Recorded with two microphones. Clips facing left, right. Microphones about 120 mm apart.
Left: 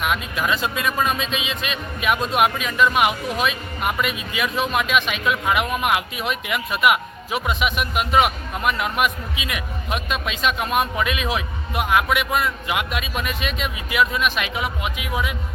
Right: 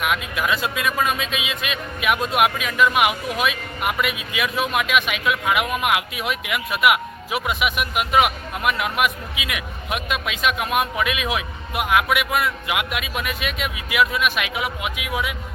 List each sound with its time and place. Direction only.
0.0 s speech: 5° right (ahead or behind)